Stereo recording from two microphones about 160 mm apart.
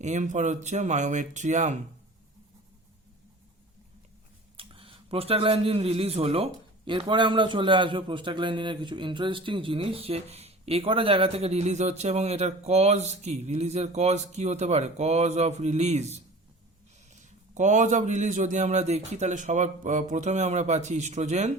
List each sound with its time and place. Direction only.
0.0 s a man's voice: 50° right (ahead or behind)
4.5 s a man's voice: 35° right (ahead or behind)